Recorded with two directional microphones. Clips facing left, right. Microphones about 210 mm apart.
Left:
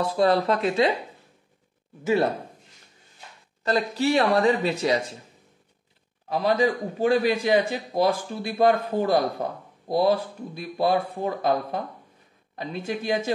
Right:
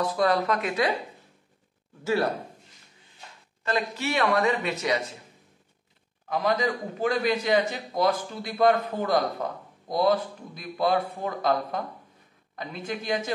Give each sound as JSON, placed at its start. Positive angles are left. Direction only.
{"t": 0.0, "sound": "a man's voice", "side_deg": 30}
{"t": 3.6, "sound": "speech", "side_deg": 35}
{"t": 6.2, "sound": "a man's voice", "side_deg": 30}
{"t": 12.5, "sound": "a man's voice", "side_deg": 30}